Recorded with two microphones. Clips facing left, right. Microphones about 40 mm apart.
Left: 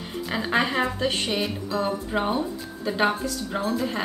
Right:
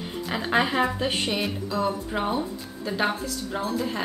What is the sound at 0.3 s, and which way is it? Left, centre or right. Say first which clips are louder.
Speech: even; centre.